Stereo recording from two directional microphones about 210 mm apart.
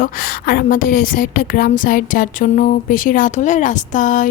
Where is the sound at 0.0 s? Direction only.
45° left (ahead or behind).